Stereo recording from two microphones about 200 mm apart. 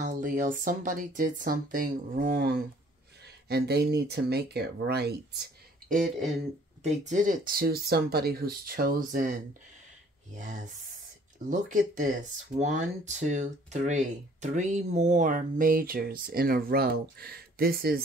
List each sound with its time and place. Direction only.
0.0 s speech: 40° right (ahead or behind)
5.9 s speech: 40° right (ahead or behind)